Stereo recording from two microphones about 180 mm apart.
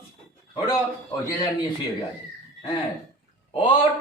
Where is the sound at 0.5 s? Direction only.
20° left (ahead or behind).